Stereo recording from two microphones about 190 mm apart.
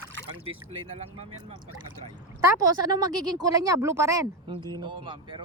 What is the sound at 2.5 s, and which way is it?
Speech, 20° right (ahead or behind).